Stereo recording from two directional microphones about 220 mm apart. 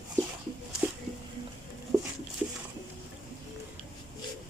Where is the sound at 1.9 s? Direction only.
15° right (ahead or behind).